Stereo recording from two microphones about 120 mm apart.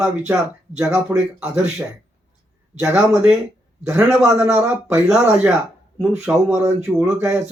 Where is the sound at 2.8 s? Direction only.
15° right (ahead or behind).